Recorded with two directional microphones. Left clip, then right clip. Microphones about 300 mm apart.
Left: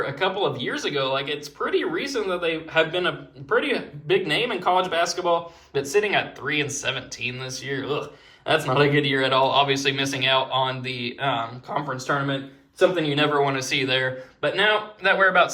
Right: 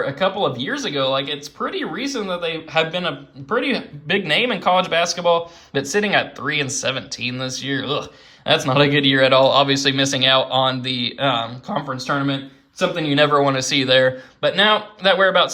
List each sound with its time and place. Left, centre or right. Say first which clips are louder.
0.0 s speech: right 4 dB; centre